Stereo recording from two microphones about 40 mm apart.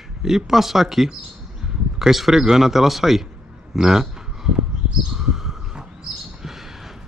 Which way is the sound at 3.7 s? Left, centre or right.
Centre.